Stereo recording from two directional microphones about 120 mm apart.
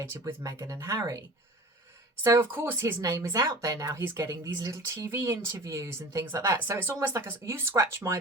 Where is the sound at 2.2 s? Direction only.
20° right (ahead or behind).